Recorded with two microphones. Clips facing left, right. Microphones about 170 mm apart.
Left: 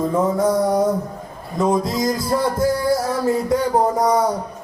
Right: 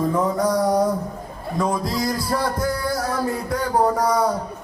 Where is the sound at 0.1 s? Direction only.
25° left (ahead or behind).